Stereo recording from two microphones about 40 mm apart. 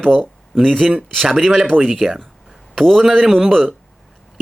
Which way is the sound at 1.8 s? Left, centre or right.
Centre.